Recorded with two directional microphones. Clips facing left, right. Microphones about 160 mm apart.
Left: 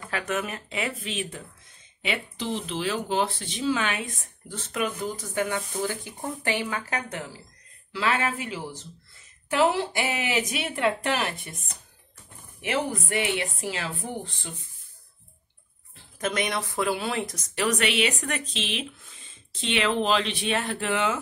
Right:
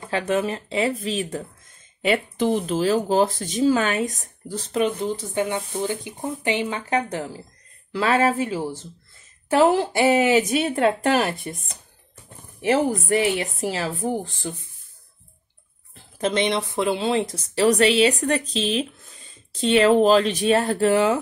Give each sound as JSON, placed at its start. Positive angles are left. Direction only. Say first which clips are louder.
{"t": 0.0, "sound": "speech", "louder": "right 7 dB", "side_deg": -30}
{"t": 7.9, "sound": "speech", "louder": "right 7 dB", "side_deg": -40}
{"t": 12.6, "sound": "speech", "louder": "right 8 dB", "side_deg": -40}
{"t": 16.2, "sound": "speech", "louder": "right 6 dB", "side_deg": -30}